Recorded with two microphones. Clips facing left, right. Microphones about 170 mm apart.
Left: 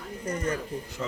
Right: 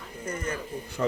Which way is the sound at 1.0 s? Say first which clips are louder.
Right 8 dB; 60° right (ahead or behind).